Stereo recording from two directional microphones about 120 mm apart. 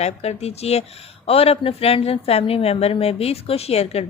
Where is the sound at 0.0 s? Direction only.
60° left (ahead or behind).